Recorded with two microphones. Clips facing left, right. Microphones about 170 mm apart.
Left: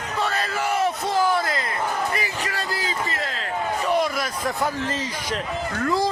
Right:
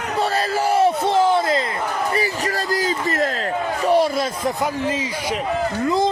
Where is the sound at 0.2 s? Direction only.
35° right (ahead or behind).